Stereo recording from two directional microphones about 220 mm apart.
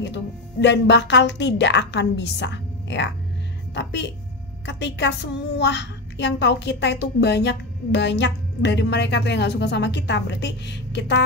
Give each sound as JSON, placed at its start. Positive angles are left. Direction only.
{"t": 0.0, "sound": "a woman's voice", "side_deg": 50}
{"t": 4.6, "sound": "a woman's voice", "side_deg": 55}